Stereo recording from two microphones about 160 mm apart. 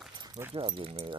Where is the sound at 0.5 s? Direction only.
35° right (ahead or behind).